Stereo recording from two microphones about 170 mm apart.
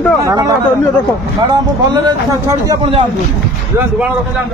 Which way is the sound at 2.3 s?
20° right (ahead or behind).